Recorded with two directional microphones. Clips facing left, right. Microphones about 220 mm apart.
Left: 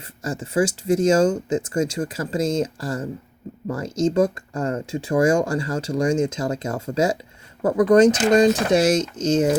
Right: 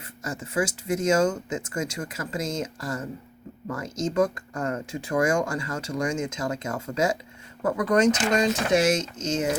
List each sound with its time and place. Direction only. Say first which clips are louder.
0.3 s speech: left 6 dB; 30° left (ahead or behind)